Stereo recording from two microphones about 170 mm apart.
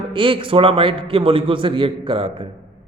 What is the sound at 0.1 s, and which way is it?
A man's voice, 30° right (ahead or behind).